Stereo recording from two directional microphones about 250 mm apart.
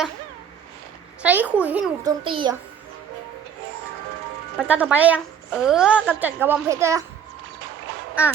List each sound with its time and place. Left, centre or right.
1.2 s a sound: centre
2.2 s a child's voice: centre
4.5 s a woman's voice: centre
8.2 s a woman's voice: centre